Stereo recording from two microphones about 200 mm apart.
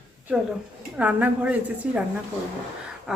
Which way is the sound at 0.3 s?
5° right (ahead or behind).